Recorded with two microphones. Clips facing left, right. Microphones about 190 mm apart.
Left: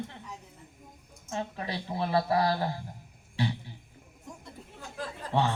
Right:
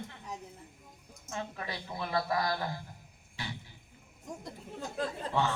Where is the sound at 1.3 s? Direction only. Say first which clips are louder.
Left 4 dB; 30° left (ahead or behind).